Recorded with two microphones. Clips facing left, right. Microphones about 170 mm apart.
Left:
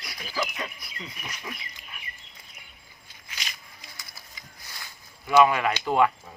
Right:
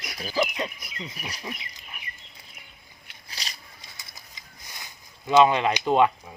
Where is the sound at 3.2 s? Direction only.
35° right (ahead or behind).